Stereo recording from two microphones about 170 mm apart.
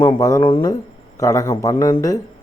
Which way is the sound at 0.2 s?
20° left (ahead or behind).